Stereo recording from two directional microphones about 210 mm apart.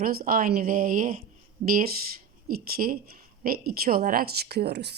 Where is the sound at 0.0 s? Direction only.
45° right (ahead or behind).